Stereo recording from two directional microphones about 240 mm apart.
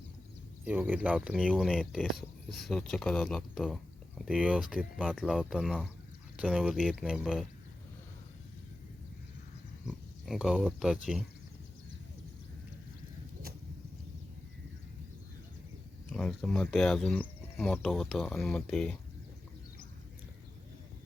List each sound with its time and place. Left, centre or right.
0.6 s speech: centre
9.8 s speech: centre
16.1 s speech: centre